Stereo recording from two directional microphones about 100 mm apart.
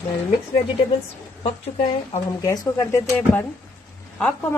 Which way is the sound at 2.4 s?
30° left (ahead or behind).